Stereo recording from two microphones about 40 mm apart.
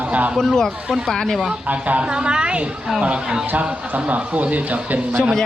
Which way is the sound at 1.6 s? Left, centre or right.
Right.